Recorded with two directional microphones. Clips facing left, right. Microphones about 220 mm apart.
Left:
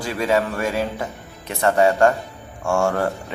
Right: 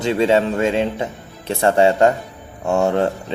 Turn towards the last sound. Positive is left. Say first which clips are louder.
# right 3 dB
turn(degrees=-20)  # may be behind; listen again after turning